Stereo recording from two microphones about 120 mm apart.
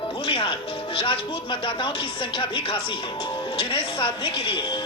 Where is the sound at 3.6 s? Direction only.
45° left (ahead or behind).